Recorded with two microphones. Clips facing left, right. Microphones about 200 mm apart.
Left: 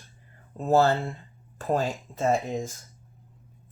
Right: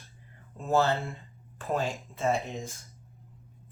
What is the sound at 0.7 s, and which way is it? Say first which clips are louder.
Speech: left 4 dB; 35° left (ahead or behind).